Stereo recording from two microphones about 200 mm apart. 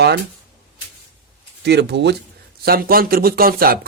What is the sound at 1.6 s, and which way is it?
Speech, 55° right (ahead or behind).